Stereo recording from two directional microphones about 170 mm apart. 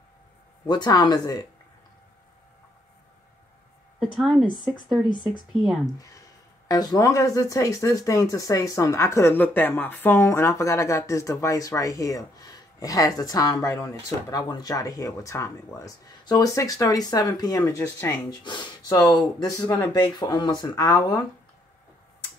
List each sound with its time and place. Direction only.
0.7 s speech: 25° left (ahead or behind)
4.0 s a woman's voice: 5° right (ahead or behind)
5.9 s speech: 20° left (ahead or behind)